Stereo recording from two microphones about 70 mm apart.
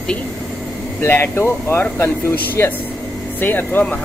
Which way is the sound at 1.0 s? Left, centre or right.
Left.